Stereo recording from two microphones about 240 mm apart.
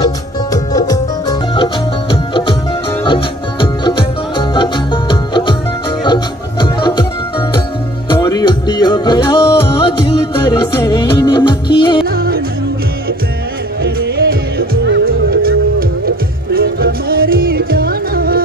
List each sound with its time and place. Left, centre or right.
0.5 s music: centre
8.1 s music: centre
13.8 s music: right